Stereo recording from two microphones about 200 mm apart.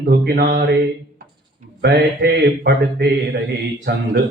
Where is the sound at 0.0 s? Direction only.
50° right (ahead or behind).